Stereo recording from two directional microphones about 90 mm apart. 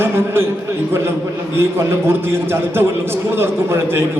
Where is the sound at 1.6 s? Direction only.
25° right (ahead or behind).